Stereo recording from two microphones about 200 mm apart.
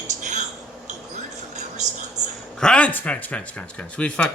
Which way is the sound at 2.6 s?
5° left (ahead or behind).